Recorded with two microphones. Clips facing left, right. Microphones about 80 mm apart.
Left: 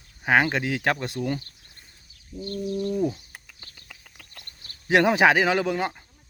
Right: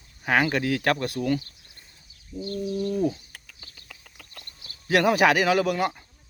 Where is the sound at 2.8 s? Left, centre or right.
Centre.